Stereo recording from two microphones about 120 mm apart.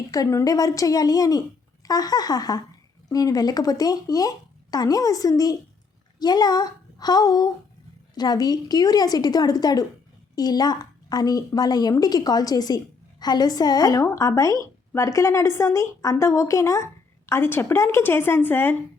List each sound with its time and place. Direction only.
0.1 s a woman's voice: 25° left (ahead or behind)